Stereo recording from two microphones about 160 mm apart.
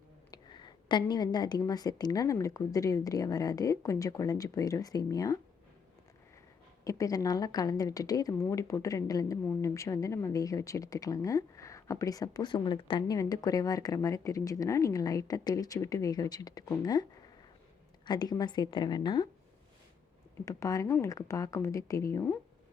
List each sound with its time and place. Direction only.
0.3 s speech: 30° left (ahead or behind)
6.8 s speech: 20° left (ahead or behind)
20.4 s speech: 20° left (ahead or behind)